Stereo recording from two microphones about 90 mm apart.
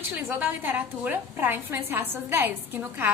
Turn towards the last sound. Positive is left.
turn(degrees=-20)  # may be behind; listen again after turning